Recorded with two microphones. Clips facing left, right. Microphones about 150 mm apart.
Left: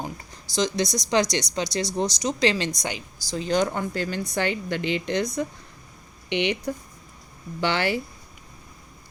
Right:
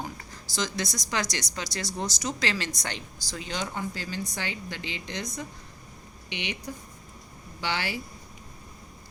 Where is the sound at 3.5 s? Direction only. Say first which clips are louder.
Left 10 dB; 50° left (ahead or behind).